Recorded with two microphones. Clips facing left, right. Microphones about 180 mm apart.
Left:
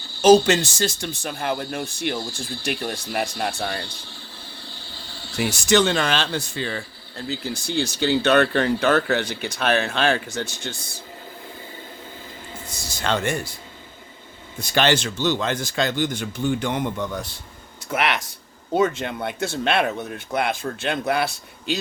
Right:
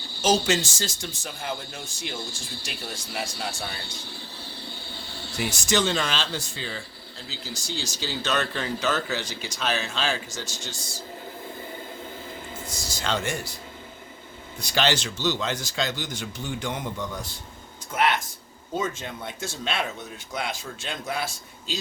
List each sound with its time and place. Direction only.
0.2 s speech: 60° left (ahead or behind)
5.5 s speech: 60° left (ahead or behind)
12.7 s speech: 55° left (ahead or behind)
14.6 s speech: 55° left (ahead or behind)
17.9 s speech: 75° left (ahead or behind)